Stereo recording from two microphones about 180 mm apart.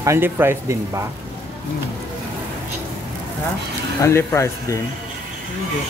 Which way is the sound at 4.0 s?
15° left (ahead or behind).